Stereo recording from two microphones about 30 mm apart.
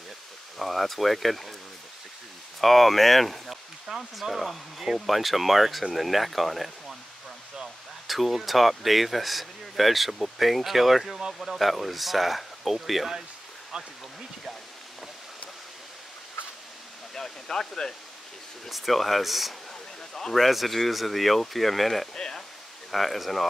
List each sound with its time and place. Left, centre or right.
0.6 s speech: centre
2.6 s speech: centre
8.1 s speech: centre
17.1 s speech: centre
18.7 s speech: centre
22.1 s speech: left
22.8 s speech: centre